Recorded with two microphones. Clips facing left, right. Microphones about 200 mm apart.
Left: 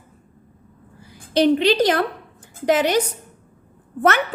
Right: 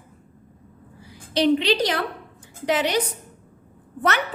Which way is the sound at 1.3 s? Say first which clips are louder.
Left 3 dB; 45° left (ahead or behind).